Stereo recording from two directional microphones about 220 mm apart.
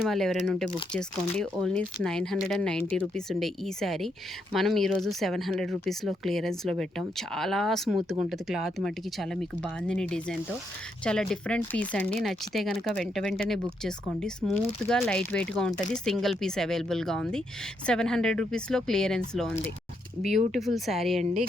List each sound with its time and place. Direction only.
0.1 s speech: centre (ahead or behind)
21.2 s a woman's voice: 30° right (ahead or behind)